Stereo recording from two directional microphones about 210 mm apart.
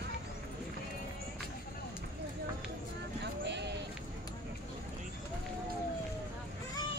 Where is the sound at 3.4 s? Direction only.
55° right (ahead or behind).